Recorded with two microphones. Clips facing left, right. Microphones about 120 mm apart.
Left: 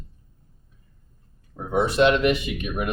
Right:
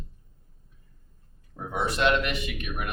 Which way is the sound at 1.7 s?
25° left (ahead or behind).